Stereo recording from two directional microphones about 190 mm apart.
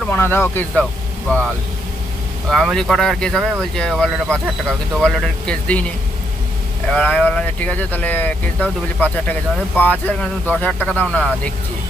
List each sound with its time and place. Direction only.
0.0 s speech: 10° left (ahead or behind)
2.5 s speech: centre (ahead or behind)
6.9 s speech: 5° left (ahead or behind)